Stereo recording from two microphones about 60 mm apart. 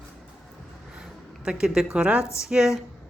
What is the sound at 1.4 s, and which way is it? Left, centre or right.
Speech, centre.